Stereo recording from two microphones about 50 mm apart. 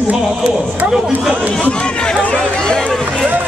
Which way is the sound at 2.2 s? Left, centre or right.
Left.